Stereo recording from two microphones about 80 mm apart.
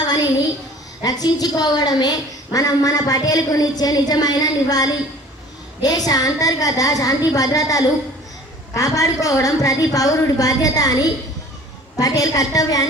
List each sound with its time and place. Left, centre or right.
1.0 s a woman's voice: left